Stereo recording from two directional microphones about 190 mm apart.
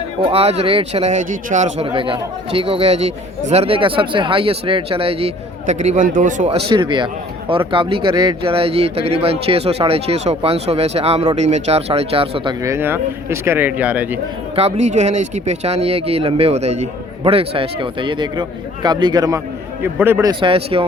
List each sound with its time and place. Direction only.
0.3 s a man's voice: 30° right (ahead or behind)
6.7 s a man's voice: 25° right (ahead or behind)
12.6 s speech: 15° right (ahead or behind)
14.5 s a man's voice: 35° right (ahead or behind); by 20.3 s 10° right (ahead or behind)
20.4 s speech: 30° right (ahead or behind)